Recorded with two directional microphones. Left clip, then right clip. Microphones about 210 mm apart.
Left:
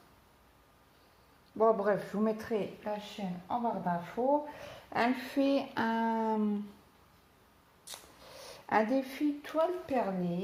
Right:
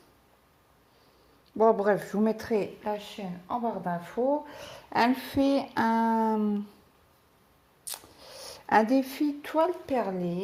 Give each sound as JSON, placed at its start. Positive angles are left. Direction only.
{"t": 1.5, "sound": "speech", "side_deg": -40}
{"t": 7.9, "sound": "speech", "side_deg": -40}